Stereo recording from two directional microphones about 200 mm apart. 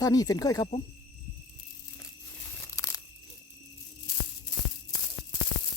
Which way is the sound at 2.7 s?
15° left (ahead or behind).